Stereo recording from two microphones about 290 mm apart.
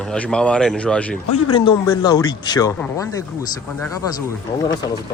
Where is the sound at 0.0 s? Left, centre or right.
Centre.